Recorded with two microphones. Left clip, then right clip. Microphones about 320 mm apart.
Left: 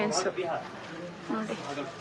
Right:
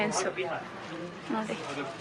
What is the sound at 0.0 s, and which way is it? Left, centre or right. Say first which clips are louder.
Speech: left 1 dB; centre.